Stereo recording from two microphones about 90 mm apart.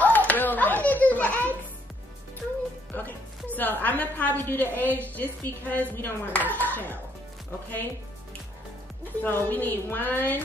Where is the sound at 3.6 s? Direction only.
20° left (ahead or behind).